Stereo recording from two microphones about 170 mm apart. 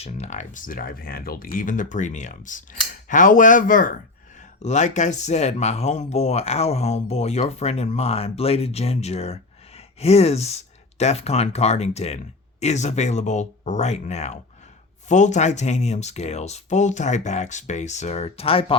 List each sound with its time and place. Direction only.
0.0 s speech: 40° left (ahead or behind)